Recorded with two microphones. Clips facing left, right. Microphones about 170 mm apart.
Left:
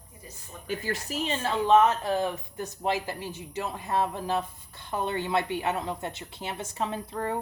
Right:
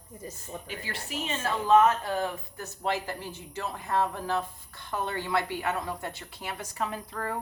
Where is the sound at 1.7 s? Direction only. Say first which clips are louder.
Even; 20° left (ahead or behind).